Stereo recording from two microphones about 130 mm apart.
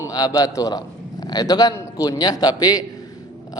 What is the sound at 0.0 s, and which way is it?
A man's voice, 30° left (ahead or behind).